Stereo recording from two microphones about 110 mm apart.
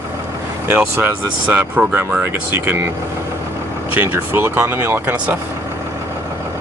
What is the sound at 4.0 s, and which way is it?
Speech, 20° right (ahead or behind).